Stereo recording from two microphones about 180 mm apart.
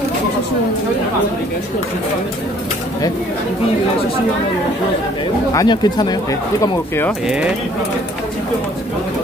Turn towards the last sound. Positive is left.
turn(degrees=-5)  # may be behind; listen again after turning